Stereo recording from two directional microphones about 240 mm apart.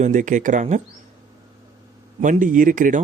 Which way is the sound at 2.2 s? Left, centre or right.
Right.